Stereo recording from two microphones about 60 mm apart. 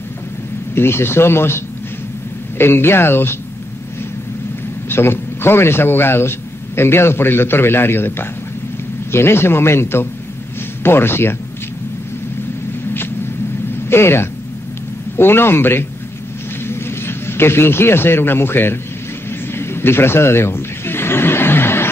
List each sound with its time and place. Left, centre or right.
0.7 s a man's voice: left
2.6 s a man's voice: left
4.8 s a man's voice: left
13.8 s a man's voice: left
19.5 s a sound: left